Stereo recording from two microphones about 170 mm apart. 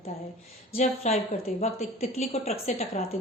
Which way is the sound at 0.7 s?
40° left (ahead or behind).